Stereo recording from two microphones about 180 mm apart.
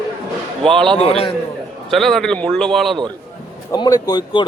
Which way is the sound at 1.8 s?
Centre (ahead or behind).